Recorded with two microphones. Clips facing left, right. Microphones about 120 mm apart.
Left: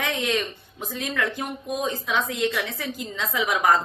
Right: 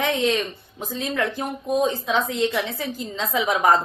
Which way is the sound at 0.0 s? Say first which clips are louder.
Right 4 dB; 30° right (ahead or behind).